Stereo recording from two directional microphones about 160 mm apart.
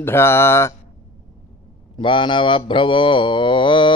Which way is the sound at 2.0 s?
30° left (ahead or behind).